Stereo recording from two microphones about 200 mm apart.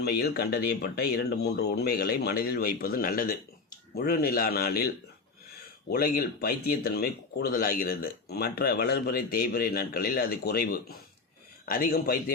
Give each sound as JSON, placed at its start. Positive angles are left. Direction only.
{"t": 0.0, "sound": "speech", "side_deg": 50}
{"t": 5.9, "sound": "speech", "side_deg": 50}